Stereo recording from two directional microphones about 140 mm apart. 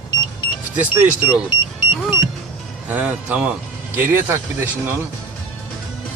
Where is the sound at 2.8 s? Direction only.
10° right (ahead or behind).